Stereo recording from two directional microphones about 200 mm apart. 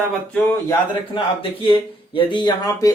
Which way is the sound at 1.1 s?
25° left (ahead or behind).